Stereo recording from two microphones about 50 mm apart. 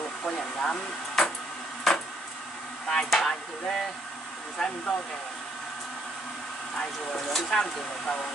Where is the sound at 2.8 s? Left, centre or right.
Centre.